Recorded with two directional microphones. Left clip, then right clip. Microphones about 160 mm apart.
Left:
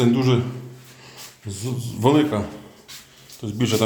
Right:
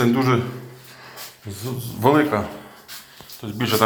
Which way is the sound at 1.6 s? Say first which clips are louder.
Right 1 dB; 20° left (ahead or behind).